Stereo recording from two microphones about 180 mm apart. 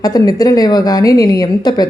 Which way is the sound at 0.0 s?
20° left (ahead or behind).